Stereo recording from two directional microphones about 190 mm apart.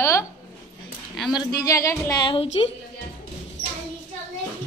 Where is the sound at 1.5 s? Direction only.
15° left (ahead or behind).